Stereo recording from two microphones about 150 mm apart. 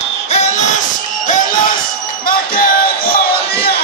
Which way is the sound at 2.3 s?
70° left (ahead or behind).